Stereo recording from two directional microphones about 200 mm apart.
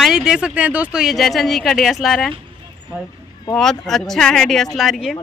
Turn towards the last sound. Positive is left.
turn(degrees=0)  # may be behind; listen again after turning